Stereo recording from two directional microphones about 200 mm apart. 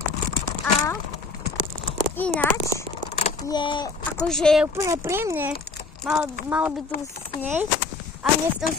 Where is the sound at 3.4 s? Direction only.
20° left (ahead or behind).